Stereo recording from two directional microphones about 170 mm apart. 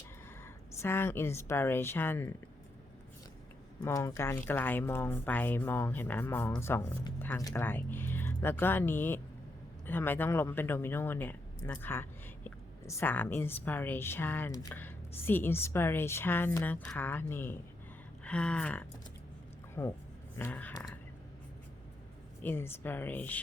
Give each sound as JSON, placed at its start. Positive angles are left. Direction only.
{"t": 0.4, "sound": "a woman's voice", "side_deg": 15}
{"t": 3.8, "sound": "a woman's voice", "side_deg": 15}
{"t": 22.4, "sound": "a woman's voice", "side_deg": 10}